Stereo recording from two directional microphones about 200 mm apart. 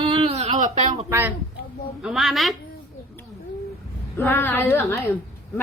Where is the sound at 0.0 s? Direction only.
25° right (ahead or behind).